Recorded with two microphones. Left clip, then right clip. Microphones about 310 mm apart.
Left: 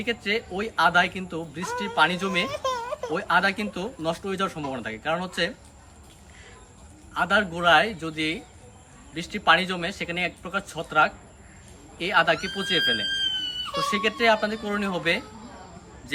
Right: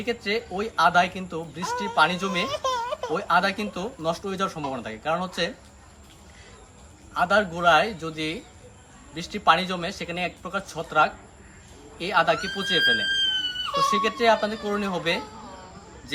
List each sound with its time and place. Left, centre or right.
0.0 s speech: centre
2.5 s a sound: right
3.1 s speech: centre
7.1 s speech: centre